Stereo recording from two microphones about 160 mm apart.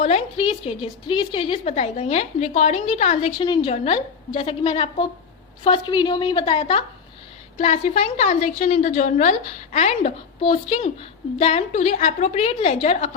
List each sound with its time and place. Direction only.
0.0 s a woman's voice: 40° left (ahead or behind)
6.6 s a woman's voice: 40° left (ahead or behind)
10.4 s a woman's voice: 35° left (ahead or behind)